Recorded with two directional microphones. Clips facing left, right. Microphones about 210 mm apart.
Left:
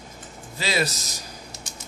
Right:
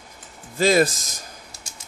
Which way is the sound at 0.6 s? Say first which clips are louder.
Right 9 dB; 50° right (ahead or behind).